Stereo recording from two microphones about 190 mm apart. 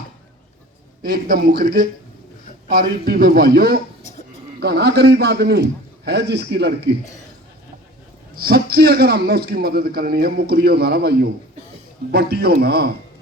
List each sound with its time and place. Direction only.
1.0 s a man's voice: 60° right (ahead or behind)
2.6 s a man's voice: 55° right (ahead or behind)
8.4 s a man's voice: 55° right (ahead or behind)